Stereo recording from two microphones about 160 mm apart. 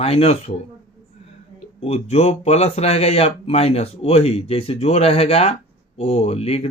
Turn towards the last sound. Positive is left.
turn(degrees=40)  # may be behind; listen again after turning